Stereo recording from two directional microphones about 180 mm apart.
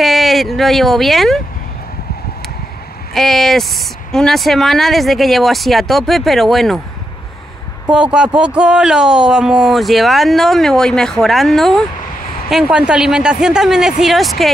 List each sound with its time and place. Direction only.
0.0 s speech: centre (ahead or behind)
3.2 s speech: centre (ahead or behind)
7.9 s speech: 5° right (ahead or behind)